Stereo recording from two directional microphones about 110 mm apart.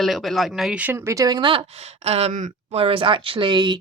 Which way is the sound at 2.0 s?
70° right (ahead or behind).